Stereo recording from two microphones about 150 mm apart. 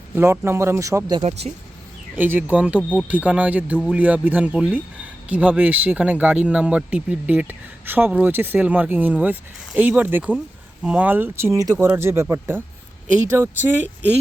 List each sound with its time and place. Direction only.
0.2 s speech: 15° right (ahead or behind)
1.2 s speech: 50° right (ahead or behind)
2.1 s speech: 10° right (ahead or behind)